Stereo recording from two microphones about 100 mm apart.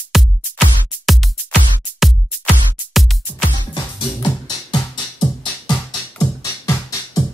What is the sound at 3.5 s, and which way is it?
Music, 50° left (ahead or behind).